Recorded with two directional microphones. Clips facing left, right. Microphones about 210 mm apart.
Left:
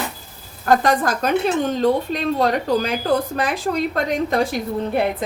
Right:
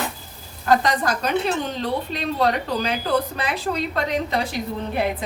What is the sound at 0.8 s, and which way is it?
A woman's voice, 50° left (ahead or behind).